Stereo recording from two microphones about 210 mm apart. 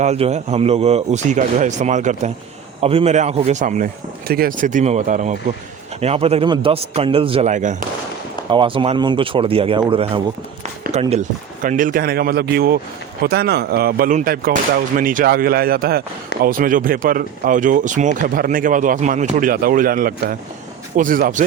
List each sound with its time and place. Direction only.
0.0 s speech: 30° right (ahead or behind)
8.4 s speech: 25° right (ahead or behind); by 21.4 s 40° right (ahead or behind)